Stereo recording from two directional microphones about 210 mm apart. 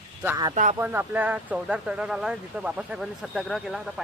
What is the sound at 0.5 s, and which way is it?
Speech, 40° right (ahead or behind).